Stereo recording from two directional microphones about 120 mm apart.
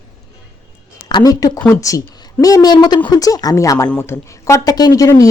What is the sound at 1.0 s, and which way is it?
Speech, 30° left (ahead or behind).